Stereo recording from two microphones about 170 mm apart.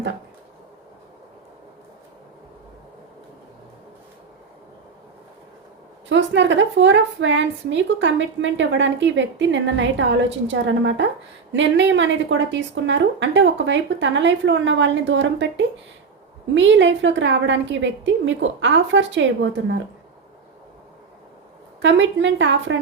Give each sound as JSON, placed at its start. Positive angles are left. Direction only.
{"t": 6.1, "sound": "a woman's voice", "side_deg": -90}
{"t": 21.8, "sound": "a woman's voice", "side_deg": -90}